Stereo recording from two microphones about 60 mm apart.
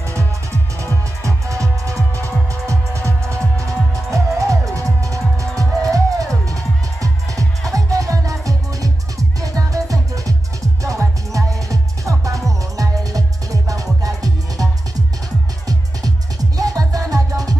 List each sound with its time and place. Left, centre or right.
1.2 s music: right